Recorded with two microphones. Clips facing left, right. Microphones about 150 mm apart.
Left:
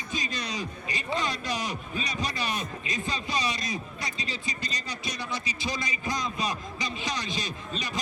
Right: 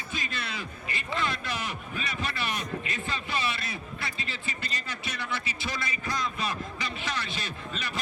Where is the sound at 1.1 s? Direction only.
15° left (ahead or behind).